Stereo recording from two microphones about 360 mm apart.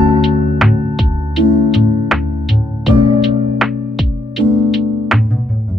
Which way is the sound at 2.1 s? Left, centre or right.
Centre.